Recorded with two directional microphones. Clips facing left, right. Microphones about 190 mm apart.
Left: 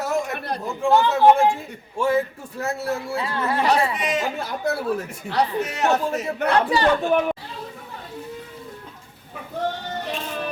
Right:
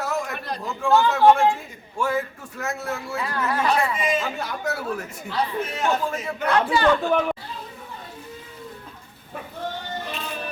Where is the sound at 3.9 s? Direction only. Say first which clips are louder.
Right 1 dB; 70° left (ahead or behind).